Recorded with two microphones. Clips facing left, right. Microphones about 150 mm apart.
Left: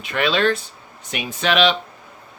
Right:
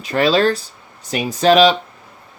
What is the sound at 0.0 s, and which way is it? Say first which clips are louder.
Speech: right 5 dB; 35° right (ahead or behind).